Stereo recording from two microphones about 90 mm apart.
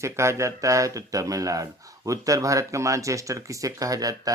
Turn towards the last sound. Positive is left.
turn(degrees=-40)  # may be behind; listen again after turning